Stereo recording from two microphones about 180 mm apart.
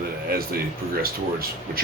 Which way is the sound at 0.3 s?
60° right (ahead or behind).